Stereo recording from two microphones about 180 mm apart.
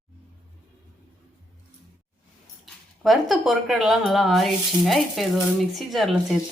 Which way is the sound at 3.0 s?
Centre (ahead or behind).